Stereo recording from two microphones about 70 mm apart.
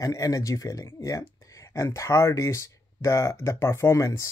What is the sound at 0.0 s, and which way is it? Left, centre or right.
Speech, left.